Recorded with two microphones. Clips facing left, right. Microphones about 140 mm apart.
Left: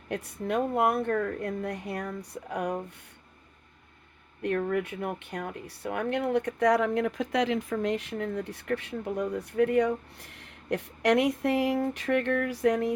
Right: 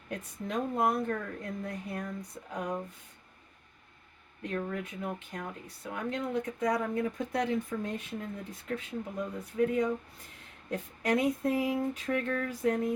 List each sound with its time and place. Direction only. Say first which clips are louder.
0.1 s speech: left 6 dB; 70° left (ahead or behind)
4.4 s speech: left 7 dB; 65° left (ahead or behind)